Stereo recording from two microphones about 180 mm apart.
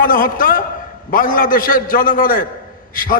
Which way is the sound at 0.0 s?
50° left (ahead or behind).